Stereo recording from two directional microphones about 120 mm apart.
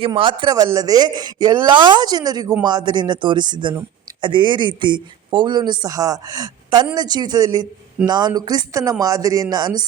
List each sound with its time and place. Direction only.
0.0 s speech: 45° right (ahead or behind)